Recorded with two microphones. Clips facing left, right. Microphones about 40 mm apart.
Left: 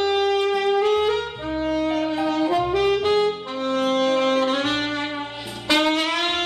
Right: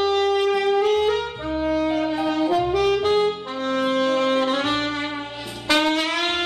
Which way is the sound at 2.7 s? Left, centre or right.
Centre.